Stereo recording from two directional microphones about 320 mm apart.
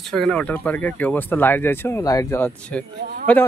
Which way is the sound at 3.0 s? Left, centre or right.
Right.